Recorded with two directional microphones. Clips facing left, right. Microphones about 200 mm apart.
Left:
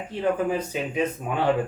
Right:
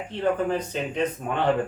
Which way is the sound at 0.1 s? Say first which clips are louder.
Even; 5° left (ahead or behind).